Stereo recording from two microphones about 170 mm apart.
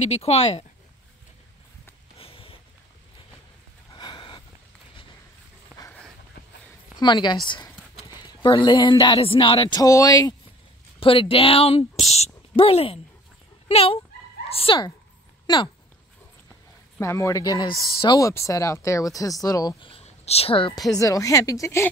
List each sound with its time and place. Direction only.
0.1 s speech: 40° left (ahead or behind)
2.1 s a sound: 35° left (ahead or behind)
3.9 s a sound: 25° left (ahead or behind)
7.0 s speech: 25° left (ahead or behind)
7.4 s a sound: 30° left (ahead or behind)
8.1 s speech: 25° left (ahead or behind)
9.8 s speech: 20° left (ahead or behind)
11.0 s speech: 30° left (ahead or behind)
17.0 s speech: 15° left (ahead or behind)